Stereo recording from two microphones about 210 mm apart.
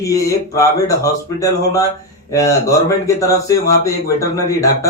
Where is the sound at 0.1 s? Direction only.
15° left (ahead or behind).